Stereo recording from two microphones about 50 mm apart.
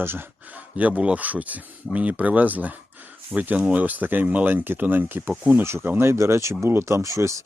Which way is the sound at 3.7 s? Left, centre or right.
Right.